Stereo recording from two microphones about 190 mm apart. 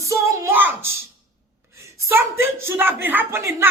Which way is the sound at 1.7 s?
15° right (ahead or behind).